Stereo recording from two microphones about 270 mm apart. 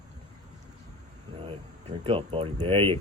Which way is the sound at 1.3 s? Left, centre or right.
Right.